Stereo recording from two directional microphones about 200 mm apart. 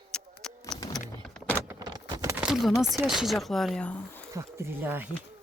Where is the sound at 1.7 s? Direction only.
20° right (ahead or behind); by 2.8 s centre (ahead or behind).